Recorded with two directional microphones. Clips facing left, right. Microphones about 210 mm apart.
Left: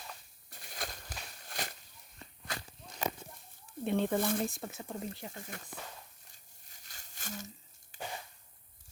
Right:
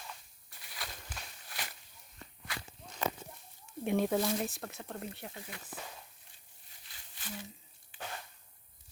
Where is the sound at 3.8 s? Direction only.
10° right (ahead or behind).